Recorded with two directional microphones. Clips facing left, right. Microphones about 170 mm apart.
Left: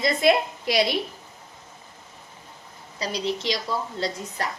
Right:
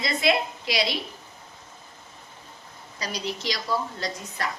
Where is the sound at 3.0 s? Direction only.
25° left (ahead or behind).